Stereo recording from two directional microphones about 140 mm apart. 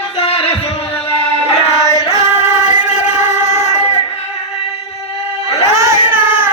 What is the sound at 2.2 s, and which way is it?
Music, 55° left (ahead or behind).